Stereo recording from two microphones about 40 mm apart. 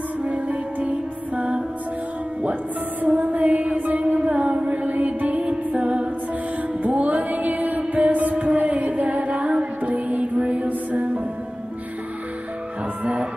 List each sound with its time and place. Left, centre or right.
0.2 s music: right
3.2 s music: right
4.2 s music: right
6.9 s music: right